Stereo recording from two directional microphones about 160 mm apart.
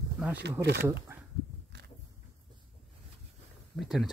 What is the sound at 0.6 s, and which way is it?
Speech, 90° right.